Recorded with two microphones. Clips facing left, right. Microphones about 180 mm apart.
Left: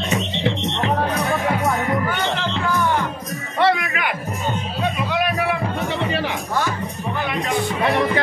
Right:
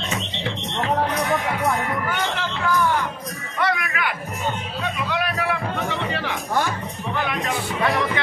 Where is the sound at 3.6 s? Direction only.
25° left (ahead or behind).